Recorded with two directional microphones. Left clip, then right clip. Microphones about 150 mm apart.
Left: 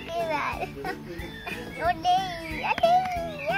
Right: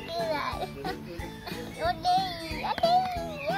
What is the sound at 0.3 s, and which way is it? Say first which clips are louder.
Music: left 2 dB; 10° left (ahead or behind).